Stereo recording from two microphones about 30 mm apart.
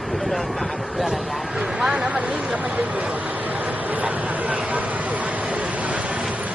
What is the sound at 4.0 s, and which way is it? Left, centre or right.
Vehicle, right.